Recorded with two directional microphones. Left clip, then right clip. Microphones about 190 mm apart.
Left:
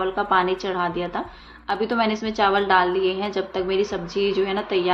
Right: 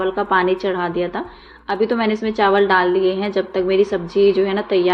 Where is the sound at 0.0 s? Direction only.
20° right (ahead or behind).